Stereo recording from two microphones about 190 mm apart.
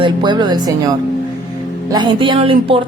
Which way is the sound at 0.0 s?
25° right (ahead or behind).